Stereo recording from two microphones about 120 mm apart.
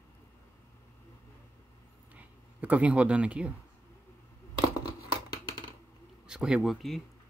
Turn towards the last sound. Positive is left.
turn(degrees=0)  # may be behind; listen again after turning